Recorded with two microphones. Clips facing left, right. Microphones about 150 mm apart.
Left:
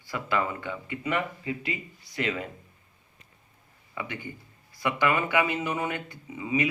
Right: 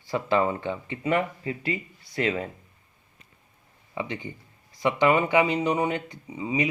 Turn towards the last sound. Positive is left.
turn(degrees=-20)  # may be behind; listen again after turning